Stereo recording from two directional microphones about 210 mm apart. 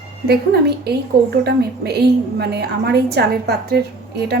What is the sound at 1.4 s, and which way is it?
A woman's voice, 50° right (ahead or behind).